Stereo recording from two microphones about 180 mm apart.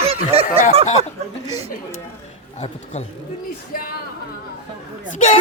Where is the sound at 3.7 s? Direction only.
55° left (ahead or behind).